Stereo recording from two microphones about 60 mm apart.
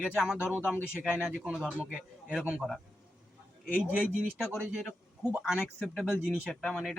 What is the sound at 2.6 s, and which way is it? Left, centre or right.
Speech, centre.